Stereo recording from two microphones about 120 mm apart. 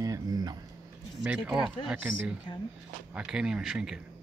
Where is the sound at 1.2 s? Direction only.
10° right (ahead or behind).